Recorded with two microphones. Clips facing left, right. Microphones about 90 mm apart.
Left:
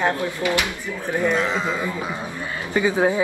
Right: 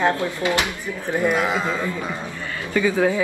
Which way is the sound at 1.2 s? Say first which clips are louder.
Right 1 dB; 10° right (ahead or behind).